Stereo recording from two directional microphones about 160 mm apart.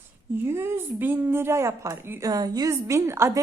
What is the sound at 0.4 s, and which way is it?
A woman's voice, 15° right (ahead or behind).